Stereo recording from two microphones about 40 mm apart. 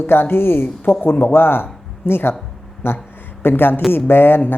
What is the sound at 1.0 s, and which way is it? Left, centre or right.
Speech, left.